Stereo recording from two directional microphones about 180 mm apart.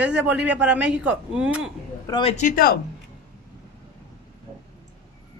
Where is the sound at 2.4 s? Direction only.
50° left (ahead or behind).